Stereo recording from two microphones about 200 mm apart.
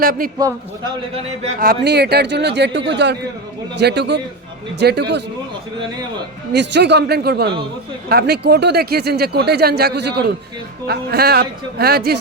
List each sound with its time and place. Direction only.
0.0 s speech: 45° right (ahead or behind)
1.5 s a man's voice: 50° right (ahead or behind)
6.5 s a man's voice: 60° right (ahead or behind)